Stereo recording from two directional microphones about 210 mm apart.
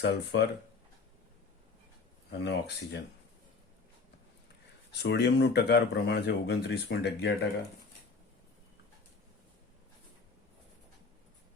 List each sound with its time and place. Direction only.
0.0 s speech: 55° left (ahead or behind)
2.4 s speech: 55° left (ahead or behind)
4.9 s speech: 55° left (ahead or behind)